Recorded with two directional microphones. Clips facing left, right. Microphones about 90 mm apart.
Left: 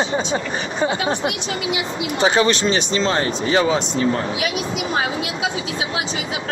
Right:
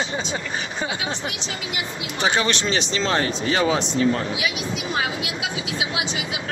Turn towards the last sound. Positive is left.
turn(degrees=35)  # may be behind; listen again after turning